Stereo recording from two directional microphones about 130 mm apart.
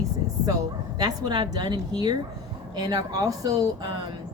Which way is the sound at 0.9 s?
30° right (ahead or behind).